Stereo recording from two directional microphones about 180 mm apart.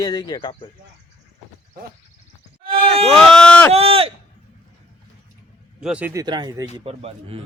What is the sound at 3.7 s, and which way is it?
Speech, 30° right (ahead or behind).